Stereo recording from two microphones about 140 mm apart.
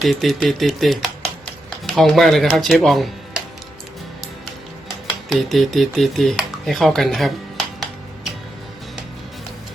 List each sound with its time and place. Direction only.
0.0 s speech: centre (ahead or behind)
5.3 s speech: centre (ahead or behind)